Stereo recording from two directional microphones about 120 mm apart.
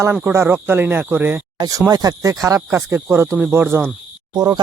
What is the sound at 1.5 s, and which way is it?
Speech, 30° right (ahead or behind).